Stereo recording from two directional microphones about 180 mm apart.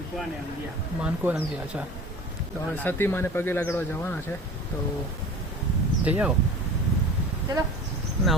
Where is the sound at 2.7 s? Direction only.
10° left (ahead or behind).